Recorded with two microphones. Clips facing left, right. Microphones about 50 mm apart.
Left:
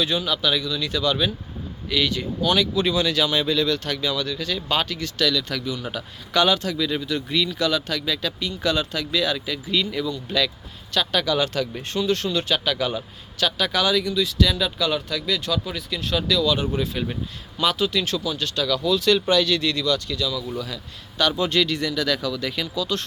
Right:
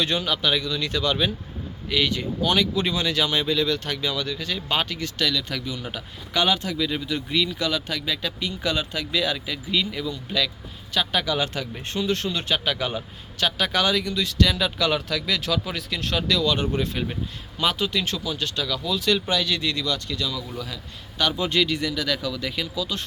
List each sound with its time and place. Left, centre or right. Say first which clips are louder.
0.0 s speech: left 1 dB; right
1.9 s speech: even; right
14.5 s speech: even; right
16.1 s speech: left 2 dB; right
17.6 s speech: left 2 dB; right
21.2 s speech: left 2 dB; centre